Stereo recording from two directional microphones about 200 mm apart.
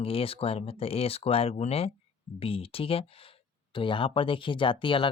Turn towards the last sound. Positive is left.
turn(degrees=25)  # may be behind; listen again after turning